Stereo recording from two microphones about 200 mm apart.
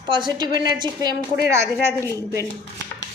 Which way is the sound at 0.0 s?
25° right (ahead or behind).